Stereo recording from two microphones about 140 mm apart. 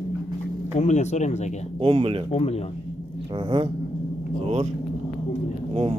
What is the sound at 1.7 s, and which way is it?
Speech, 40° right (ahead or behind).